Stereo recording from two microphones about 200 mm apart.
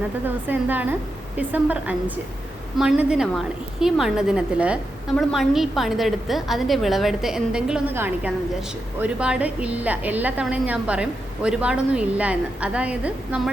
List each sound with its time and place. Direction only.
0.3 s a woman's voice: 10° right (ahead or behind)